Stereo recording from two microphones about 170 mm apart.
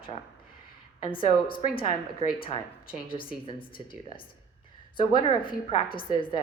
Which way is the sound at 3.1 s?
30° left (ahead or behind).